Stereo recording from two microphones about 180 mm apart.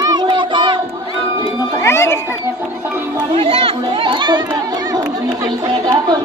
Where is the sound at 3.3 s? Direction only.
30° right (ahead or behind).